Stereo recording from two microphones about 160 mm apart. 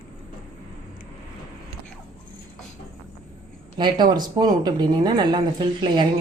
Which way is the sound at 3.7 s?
25° right (ahead or behind).